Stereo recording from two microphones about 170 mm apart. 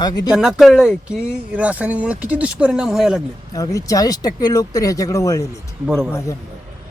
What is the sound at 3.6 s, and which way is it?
A man's voice, 20° left (ahead or behind).